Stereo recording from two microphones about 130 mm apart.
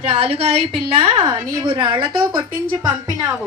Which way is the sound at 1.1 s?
35° right (ahead or behind).